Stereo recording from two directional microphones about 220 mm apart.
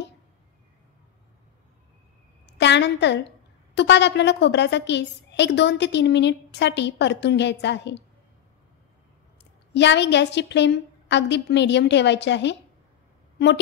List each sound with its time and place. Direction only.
2.4 s a woman's voice: 50° left (ahead or behind)
9.8 s a woman's voice: 50° left (ahead or behind)